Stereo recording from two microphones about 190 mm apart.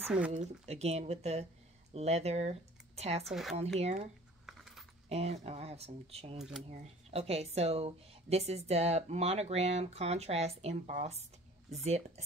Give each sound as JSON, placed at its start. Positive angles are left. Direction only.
{"t": 0.0, "sound": "speech", "side_deg": -5}
{"t": 0.3, "sound": "speech", "side_deg": -35}
{"t": 3.3, "sound": "speech", "side_deg": 0}
{"t": 3.5, "sound": "speech", "side_deg": -35}
{"t": 4.5, "sound": "keys jangling", "side_deg": 0}
{"t": 5.1, "sound": "speech", "side_deg": -35}
{"t": 6.3, "sound": "speech", "side_deg": 0}
{"t": 6.7, "sound": "speech", "side_deg": -30}